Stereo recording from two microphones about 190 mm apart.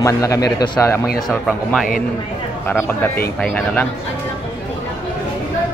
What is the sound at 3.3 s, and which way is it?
Speech, 5° left (ahead or behind).